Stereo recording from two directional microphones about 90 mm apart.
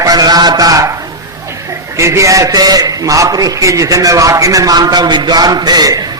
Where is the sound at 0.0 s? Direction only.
45° right (ahead or behind).